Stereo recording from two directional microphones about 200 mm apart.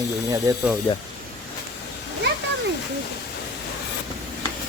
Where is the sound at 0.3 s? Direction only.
15° right (ahead or behind).